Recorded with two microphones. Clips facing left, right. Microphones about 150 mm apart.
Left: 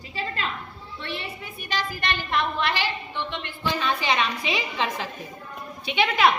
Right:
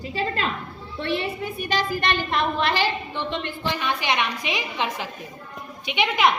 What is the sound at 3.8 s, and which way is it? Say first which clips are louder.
A woman's voice: left 1 dB; 15° right (ahead or behind).